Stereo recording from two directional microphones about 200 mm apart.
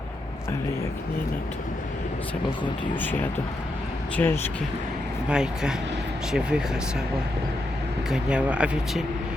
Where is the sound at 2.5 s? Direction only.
25° left (ahead or behind).